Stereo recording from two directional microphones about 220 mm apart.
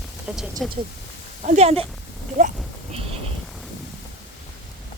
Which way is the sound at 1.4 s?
30° right (ahead or behind).